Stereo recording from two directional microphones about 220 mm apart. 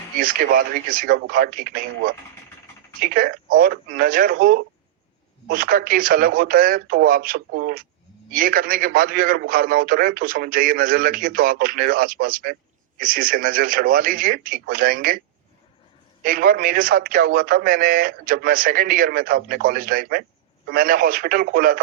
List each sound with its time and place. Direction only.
0.2 s a man's voice: 40° right (ahead or behind)
3.0 s a man's voice: 40° right (ahead or behind)
16.2 s a man's voice: 40° right (ahead or behind)